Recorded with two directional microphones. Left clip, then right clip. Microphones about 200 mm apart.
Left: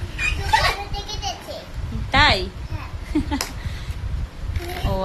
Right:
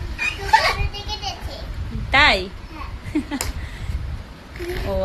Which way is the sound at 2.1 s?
Centre (ahead or behind).